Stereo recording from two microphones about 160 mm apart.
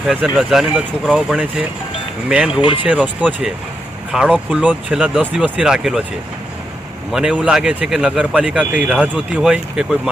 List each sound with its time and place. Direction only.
0.1 s speech: centre (ahead or behind)
2.6 s speech: 30° left (ahead or behind)
2.8 s speech: 10° right (ahead or behind)
7.1 s speech: 5° right (ahead or behind)